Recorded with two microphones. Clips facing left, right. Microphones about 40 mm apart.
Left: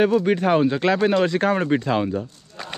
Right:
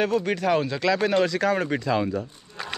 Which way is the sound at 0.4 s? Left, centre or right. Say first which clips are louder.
Left 4 dB; left.